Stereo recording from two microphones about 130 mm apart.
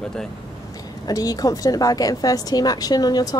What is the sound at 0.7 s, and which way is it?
A woman's voice, 30° left (ahead or behind).